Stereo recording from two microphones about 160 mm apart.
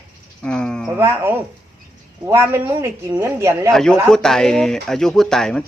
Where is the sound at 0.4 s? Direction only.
5° left (ahead or behind).